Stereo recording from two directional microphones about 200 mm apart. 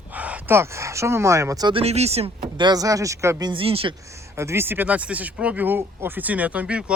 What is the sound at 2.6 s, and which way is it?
Speech, 20° right (ahead or behind).